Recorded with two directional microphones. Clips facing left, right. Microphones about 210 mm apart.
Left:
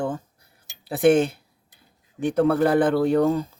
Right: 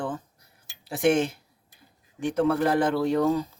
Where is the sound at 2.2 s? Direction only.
55° left (ahead or behind).